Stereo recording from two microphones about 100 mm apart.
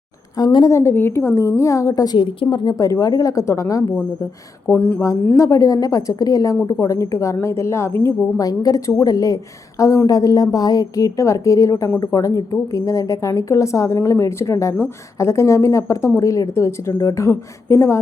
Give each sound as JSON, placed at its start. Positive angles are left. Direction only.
{"t": 0.3, "sound": "a woman's voice", "side_deg": 45}
{"t": 0.7, "sound": "a woman's voice", "side_deg": 30}
{"t": 2.2, "sound": "a woman's voice", "side_deg": 60}
{"t": 2.6, "sound": "a woman's voice", "side_deg": 35}
{"t": 4.6, "sound": "speech", "side_deg": 15}
{"t": 5.4, "sound": "a woman's voice", "side_deg": 35}
{"t": 8.4, "sound": "a woman's voice", "side_deg": 35}